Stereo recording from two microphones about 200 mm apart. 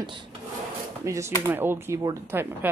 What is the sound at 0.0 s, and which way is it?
Speech, 25° right (ahead or behind).